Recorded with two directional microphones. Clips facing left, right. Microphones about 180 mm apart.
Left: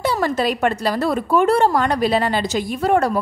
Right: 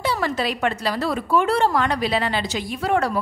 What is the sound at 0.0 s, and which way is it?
Speech, 45° left (ahead or behind).